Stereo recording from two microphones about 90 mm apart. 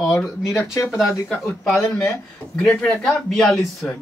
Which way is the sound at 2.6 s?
10° left (ahead or behind).